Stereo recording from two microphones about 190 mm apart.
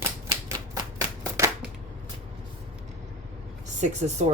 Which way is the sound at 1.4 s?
15° right (ahead or behind).